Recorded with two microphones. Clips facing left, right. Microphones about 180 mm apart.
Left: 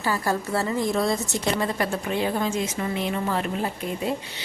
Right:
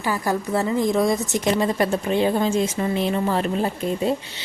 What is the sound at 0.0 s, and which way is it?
Speech, 15° right (ahead or behind).